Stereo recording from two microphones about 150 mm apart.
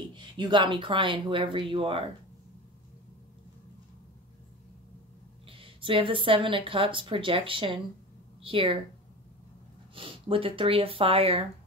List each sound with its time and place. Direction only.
0.1 s speech: 30° right (ahead or behind)
5.5 s a woman's voice: 35° right (ahead or behind)
9.9 s speech: 35° right (ahead or behind)